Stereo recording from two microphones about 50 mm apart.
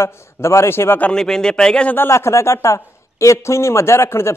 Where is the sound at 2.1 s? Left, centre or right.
Left.